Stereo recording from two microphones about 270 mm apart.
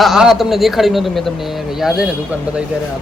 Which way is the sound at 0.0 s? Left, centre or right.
Centre.